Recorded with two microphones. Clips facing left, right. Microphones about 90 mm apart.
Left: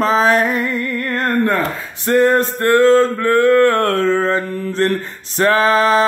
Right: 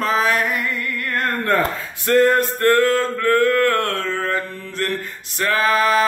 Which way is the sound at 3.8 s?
35° left (ahead or behind).